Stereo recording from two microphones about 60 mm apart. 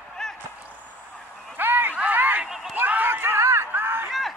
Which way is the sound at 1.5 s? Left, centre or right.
Right.